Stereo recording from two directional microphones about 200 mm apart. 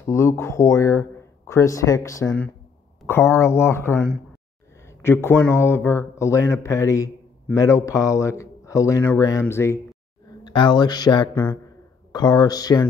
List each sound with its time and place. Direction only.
0.0 s speech: 15° left (ahead or behind)
10.5 s speech: 25° left (ahead or behind)